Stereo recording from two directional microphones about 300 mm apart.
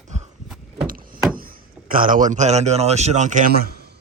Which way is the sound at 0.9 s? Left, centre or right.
Right.